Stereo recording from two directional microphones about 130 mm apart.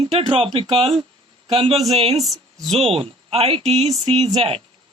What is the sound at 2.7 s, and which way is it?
Speech, 50° right (ahead or behind).